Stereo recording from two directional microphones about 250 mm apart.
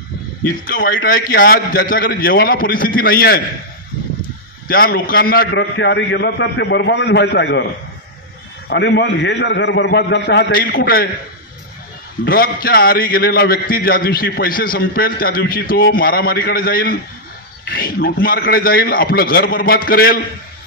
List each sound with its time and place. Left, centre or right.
0.7 s a man's voice: left
4.6 s a man's voice: left
8.6 s a man's voice: left
12.3 s a man's voice: left